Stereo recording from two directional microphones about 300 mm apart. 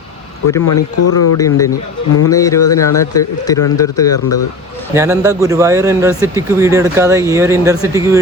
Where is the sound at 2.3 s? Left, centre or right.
Centre.